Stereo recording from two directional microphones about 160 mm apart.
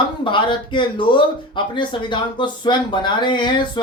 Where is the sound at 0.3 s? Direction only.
30° left (ahead or behind).